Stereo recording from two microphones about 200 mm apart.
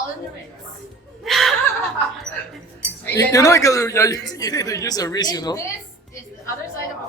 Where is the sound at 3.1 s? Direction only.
15° left (ahead or behind).